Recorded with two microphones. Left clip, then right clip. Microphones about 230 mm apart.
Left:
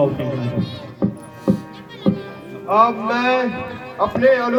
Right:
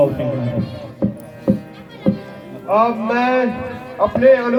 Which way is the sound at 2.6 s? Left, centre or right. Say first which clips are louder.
Even; left.